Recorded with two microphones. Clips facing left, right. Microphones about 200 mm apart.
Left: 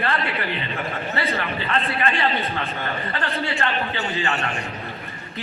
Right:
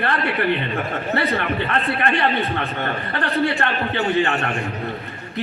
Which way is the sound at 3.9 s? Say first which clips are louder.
Right 6 dB; 55° right (ahead or behind).